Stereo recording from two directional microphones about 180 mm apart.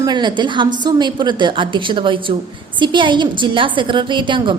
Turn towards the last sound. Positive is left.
turn(degrees=-25)  # may be behind; listen again after turning